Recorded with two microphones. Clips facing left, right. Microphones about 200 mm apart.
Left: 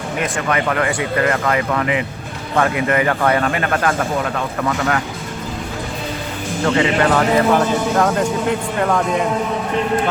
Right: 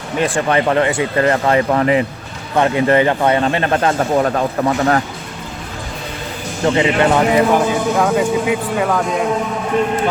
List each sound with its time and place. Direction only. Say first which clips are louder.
0.2 s a man's voice: right 5 dB; 30° right (ahead or behind)
6.7 s a man's voice: right 2 dB; 20° right (ahead or behind)
7.9 s speech: right 2 dB; 5° right (ahead or behind)